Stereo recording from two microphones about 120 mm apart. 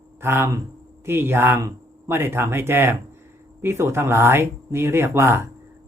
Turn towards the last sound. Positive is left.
turn(degrees=-20)  # may be behind; listen again after turning